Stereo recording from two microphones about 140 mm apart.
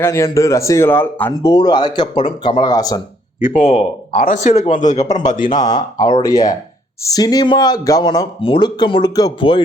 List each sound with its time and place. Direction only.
0.0 s speech: 20° left (ahead or behind)
1.3 s speech: 25° left (ahead or behind)
3.4 s speech: 60° left (ahead or behind)
5.6 s speech: 25° left (ahead or behind)
8.4 s speech: 40° left (ahead or behind)